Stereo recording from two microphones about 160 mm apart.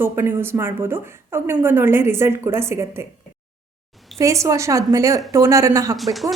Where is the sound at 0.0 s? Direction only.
15° right (ahead or behind).